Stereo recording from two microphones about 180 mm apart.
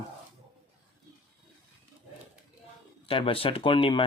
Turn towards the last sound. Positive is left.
turn(degrees=30)  # may be behind; listen again after turning